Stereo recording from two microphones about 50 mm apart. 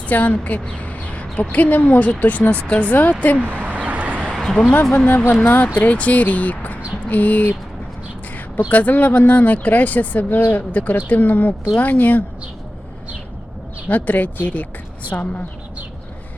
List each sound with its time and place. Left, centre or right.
0.1 s speech: left
3.3 s a sound: right
4.3 s a sound: centre
4.7 s speech: left
8.7 s speech: left
13.8 s speech: left